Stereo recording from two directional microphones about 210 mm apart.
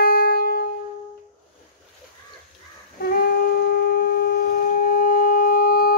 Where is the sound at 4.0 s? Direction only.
45° left (ahead or behind).